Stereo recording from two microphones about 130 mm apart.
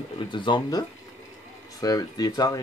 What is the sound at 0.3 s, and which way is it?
Speech, 35° left (ahead or behind).